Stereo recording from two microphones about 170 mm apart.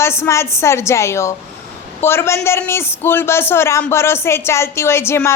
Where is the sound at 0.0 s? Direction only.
15° left (ahead or behind).